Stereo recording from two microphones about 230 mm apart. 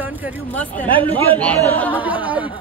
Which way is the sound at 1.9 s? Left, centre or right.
Centre.